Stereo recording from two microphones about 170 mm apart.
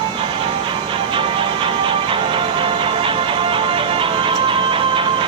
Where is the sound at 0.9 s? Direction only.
30° right (ahead or behind).